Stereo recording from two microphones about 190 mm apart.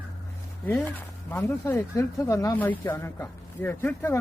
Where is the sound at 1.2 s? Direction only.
15° left (ahead or behind).